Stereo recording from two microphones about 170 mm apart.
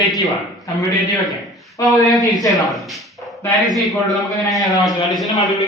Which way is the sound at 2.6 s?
Centre (ahead or behind).